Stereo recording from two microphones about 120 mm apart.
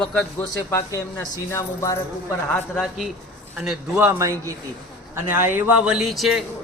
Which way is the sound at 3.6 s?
10° right (ahead or behind).